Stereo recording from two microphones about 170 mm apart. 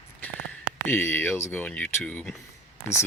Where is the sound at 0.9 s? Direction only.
10° left (ahead or behind).